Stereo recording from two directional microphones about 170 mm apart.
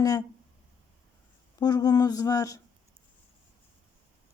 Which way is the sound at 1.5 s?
20° left (ahead or behind).